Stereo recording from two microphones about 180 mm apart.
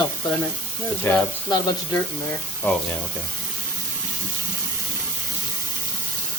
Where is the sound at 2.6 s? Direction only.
10° left (ahead or behind).